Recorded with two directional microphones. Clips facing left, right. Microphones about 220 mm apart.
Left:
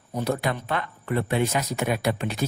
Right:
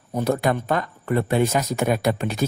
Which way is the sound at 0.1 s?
50° right (ahead or behind).